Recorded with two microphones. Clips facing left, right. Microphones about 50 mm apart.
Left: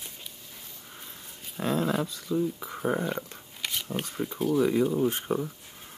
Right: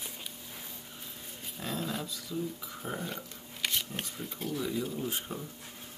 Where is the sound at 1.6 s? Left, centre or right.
Left.